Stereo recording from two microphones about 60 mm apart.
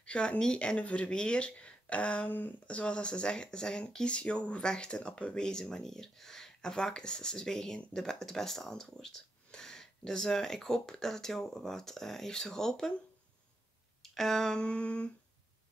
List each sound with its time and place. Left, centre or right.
0.0 s speech: centre
14.0 s speech: centre